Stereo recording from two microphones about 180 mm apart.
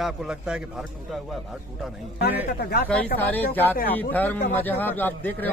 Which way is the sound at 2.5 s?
60° left (ahead or behind).